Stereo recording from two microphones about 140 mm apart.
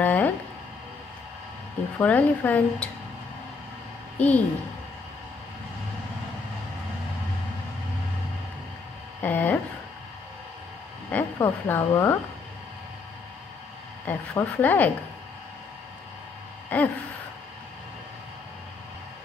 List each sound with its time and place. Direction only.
0.0 s a sound: 10° left (ahead or behind)
2.0 s speech: 10° left (ahead or behind)
4.2 s speech: 10° left (ahead or behind)
9.2 s speech: 15° left (ahead or behind)
11.1 s speech: 15° left (ahead or behind)
14.0 s speech: 15° left (ahead or behind)
16.6 s a sound: 10° left (ahead or behind)